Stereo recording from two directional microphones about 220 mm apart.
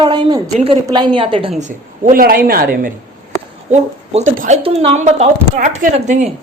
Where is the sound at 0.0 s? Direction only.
20° right (ahead or behind).